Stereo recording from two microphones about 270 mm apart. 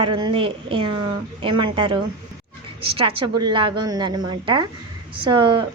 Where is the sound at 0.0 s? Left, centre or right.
Centre.